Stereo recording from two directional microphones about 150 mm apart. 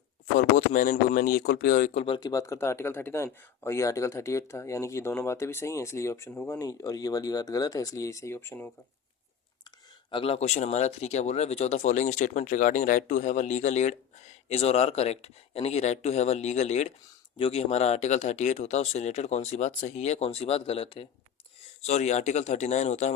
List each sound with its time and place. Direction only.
0.3 s speech: 65° left (ahead or behind)
2.0 s speech: 35° left (ahead or behind); by 8.7 s 15° left (ahead or behind)
10.1 s speech: 35° left (ahead or behind)